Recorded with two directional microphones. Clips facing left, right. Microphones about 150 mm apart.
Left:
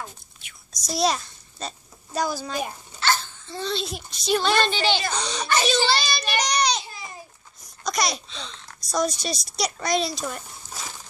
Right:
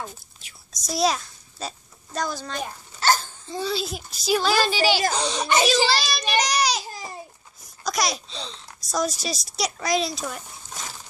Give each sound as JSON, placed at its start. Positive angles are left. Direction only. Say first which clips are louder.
{"t": 0.8, "sound": "a child's voice", "louder": "right 1 dB", "side_deg": 0}
{"t": 3.0, "sound": "dog", "louder": "right 3 dB", "side_deg": -40}
{"t": 3.4, "sound": "a child's voice", "louder": "right 2 dB", "side_deg": -10}
{"t": 5.9, "sound": "child singing", "louder": "even", "side_deg": 0}
{"t": 6.9, "sound": "a sound", "louder": "right 4 dB", "side_deg": -40}
{"t": 7.8, "sound": "a sound", "louder": "even", "side_deg": 0}
{"t": 8.3, "sound": "a child's voice", "louder": "right 2 dB", "side_deg": -35}
{"t": 8.6, "sound": "a child's voice", "louder": "left 1 dB", "side_deg": 0}